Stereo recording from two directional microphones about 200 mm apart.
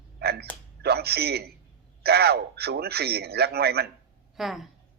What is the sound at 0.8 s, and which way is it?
A man's voice, 55° right (ahead or behind).